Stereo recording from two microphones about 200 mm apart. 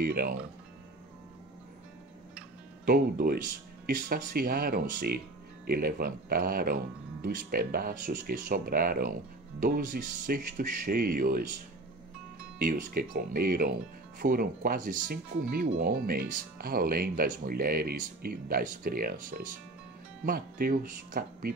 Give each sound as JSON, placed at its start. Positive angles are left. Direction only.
{"t": 0.0, "sound": "speech", "side_deg": -50}
{"t": 2.9, "sound": "speech", "side_deg": -50}
{"t": 10.1, "sound": "speech", "side_deg": -45}
{"t": 12.6, "sound": "speech", "side_deg": -45}